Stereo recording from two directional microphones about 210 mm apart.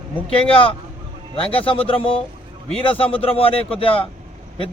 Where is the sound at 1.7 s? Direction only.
25° left (ahead or behind).